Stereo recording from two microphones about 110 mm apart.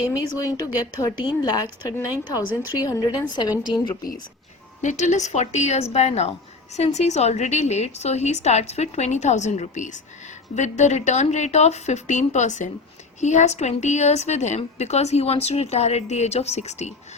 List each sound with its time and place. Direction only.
0.1 s a woman's voice: 30° left (ahead or behind)
4.8 s a woman's voice: 90° left